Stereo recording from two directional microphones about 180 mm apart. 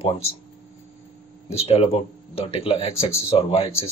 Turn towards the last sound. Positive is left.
turn(degrees=35)  # may be behind; listen again after turning